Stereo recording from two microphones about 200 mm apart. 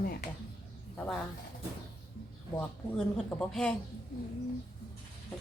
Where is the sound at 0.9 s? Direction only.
5° left (ahead or behind).